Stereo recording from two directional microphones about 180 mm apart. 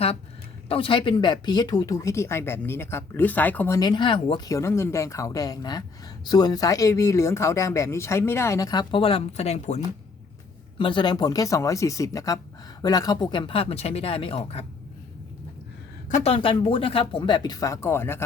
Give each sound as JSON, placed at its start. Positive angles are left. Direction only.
{"t": 0.7, "sound": "speech", "side_deg": 30}
{"t": 3.8, "sound": "speech", "side_deg": 25}
{"t": 10.8, "sound": "speech", "side_deg": 25}
{"t": 16.0, "sound": "speech", "side_deg": 40}